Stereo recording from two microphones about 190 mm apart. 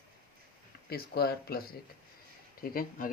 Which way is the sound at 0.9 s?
55° left (ahead or behind).